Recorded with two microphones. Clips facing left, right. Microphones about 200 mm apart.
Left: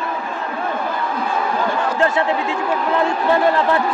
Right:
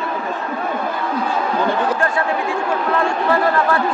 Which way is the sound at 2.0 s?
20° left (ahead or behind).